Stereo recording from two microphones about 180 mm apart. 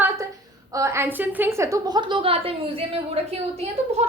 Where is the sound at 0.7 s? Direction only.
15° right (ahead or behind).